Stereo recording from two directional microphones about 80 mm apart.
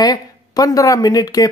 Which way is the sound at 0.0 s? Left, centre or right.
Left.